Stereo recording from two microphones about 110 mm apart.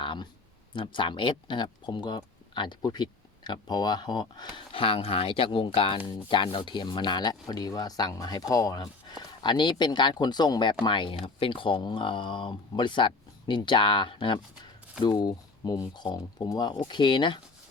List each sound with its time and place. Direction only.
0.0 s a sound: 50° left (ahead or behind)
0.7 s speech: 50° left (ahead or behind)
4.7 s speech: 55° left (ahead or behind)